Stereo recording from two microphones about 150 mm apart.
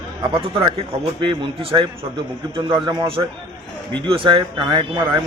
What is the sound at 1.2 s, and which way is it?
Speech, 35° right (ahead or behind).